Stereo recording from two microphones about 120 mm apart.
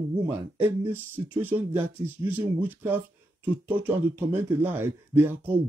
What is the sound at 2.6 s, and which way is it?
Speech, 15° right (ahead or behind).